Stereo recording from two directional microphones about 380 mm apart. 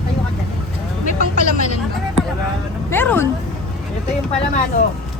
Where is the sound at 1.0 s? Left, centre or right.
Centre.